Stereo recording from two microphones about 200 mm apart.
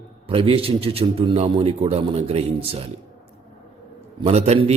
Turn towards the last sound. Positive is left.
turn(degrees=-30)  # may be behind; listen again after turning